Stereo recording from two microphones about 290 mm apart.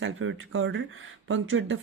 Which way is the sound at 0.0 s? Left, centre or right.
Right.